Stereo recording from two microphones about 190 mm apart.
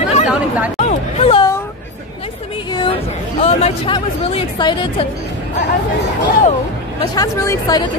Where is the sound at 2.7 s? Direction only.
25° left (ahead or behind).